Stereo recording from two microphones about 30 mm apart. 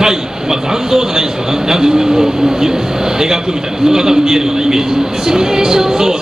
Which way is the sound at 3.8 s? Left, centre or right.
Right.